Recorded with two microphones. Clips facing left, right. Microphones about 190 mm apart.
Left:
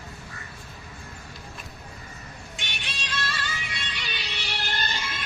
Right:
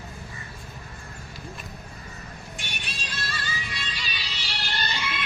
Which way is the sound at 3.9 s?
65° left (ahead or behind).